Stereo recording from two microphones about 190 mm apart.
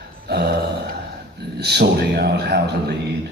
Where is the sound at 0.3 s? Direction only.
60° right (ahead or behind).